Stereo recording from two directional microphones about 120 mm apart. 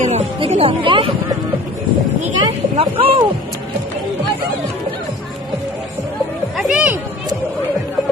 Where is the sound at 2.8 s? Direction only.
50° right (ahead or behind).